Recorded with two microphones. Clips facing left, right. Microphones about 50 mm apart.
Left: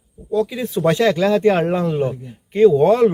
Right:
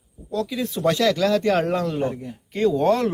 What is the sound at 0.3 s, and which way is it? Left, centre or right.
Speech, centre.